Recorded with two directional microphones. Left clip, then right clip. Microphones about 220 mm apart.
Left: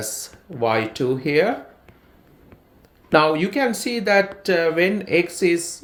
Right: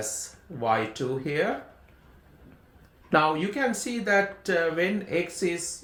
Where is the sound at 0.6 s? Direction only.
35° left (ahead or behind).